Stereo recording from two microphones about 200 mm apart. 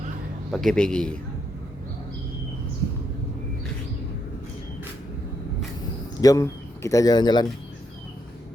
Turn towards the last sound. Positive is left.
turn(degrees=20)  # may be behind; listen again after turning